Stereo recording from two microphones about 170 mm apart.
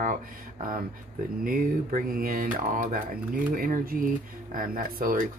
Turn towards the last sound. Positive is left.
turn(degrees=-55)  # may be behind; listen again after turning